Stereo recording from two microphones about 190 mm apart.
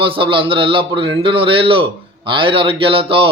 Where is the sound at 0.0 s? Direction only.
25° right (ahead or behind).